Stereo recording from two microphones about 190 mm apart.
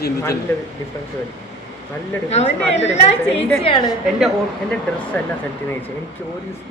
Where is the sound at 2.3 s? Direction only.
35° left (ahead or behind).